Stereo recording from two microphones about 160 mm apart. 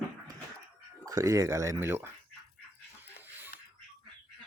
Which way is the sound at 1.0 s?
20° right (ahead or behind).